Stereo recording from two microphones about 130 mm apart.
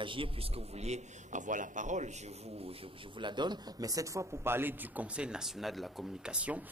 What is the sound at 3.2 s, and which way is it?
A man's voice, 35° right (ahead or behind).